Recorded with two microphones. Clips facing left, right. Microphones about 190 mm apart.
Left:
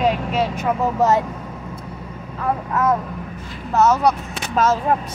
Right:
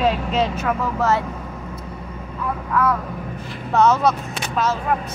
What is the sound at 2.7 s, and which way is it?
Speech, 20° left (ahead or behind).